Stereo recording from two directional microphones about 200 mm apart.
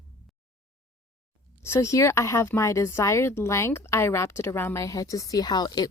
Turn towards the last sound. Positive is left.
turn(degrees=20)  # may be behind; listen again after turning